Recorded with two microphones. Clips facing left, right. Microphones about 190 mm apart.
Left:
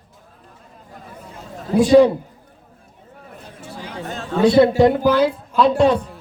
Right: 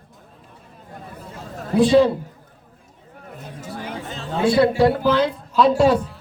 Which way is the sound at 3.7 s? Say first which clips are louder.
Right 3 dB; 55° right (ahead or behind).